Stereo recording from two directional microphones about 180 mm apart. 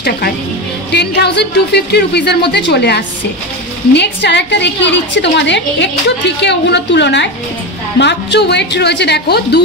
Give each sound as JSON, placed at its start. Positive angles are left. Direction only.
{"t": 0.9, "sound": "a woman's voice", "side_deg": 65}